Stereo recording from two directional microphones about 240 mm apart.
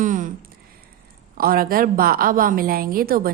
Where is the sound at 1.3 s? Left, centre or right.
Right.